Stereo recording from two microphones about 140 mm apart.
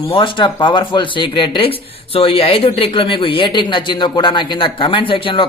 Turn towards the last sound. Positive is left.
turn(degrees=35)  # may be behind; listen again after turning